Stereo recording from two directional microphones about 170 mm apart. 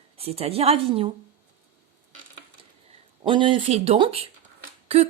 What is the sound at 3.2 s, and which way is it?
A woman's voice, 30° right (ahead or behind).